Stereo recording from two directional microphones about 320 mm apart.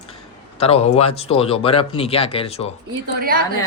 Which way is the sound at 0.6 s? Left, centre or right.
Centre.